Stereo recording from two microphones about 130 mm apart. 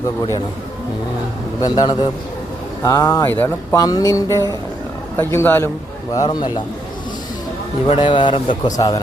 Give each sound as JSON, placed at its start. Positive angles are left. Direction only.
{"t": 1.6, "sound": "a man's voice", "side_deg": 30}
{"t": 3.8, "sound": "speech", "side_deg": 30}
{"t": 6.2, "sound": "a man's voice", "side_deg": 40}
{"t": 7.9, "sound": "a man's voice", "side_deg": 40}